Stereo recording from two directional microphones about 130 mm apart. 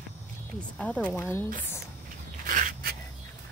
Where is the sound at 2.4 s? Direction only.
90° right.